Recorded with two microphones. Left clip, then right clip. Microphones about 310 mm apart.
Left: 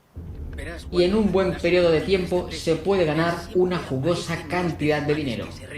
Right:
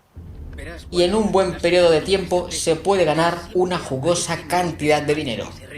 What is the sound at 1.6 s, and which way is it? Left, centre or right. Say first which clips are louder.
A woman's voice: right 4 dB; right.